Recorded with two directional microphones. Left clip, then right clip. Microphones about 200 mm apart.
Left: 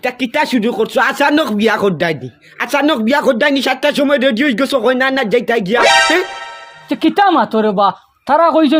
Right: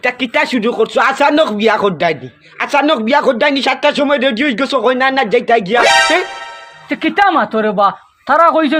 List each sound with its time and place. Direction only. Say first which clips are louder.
0.0 s speech: right 2 dB; 45° left (ahead or behind)
5.8 s music: left 2 dB; centre (ahead or behind)
6.8 s speech: even; 30° left (ahead or behind)